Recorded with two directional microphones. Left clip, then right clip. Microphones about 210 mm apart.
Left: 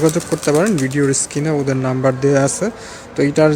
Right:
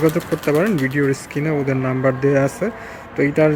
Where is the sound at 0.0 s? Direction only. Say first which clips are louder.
Left 2 dB; 15° left (ahead or behind).